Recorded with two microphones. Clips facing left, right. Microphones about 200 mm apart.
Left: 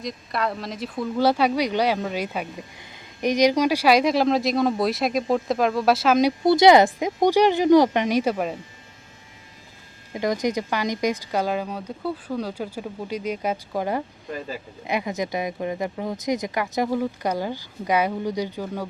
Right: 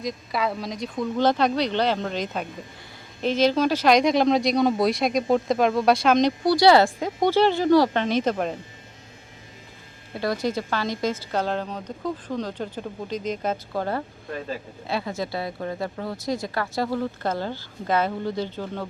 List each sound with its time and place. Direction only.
0.0 s speech: centre (ahead or behind)
6.4 s speech: 20° left (ahead or behind)
10.2 s speech: 15° left (ahead or behind)
14.8 s speech: 15° left (ahead or behind)